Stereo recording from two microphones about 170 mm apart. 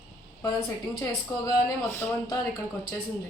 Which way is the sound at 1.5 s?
15° left (ahead or behind).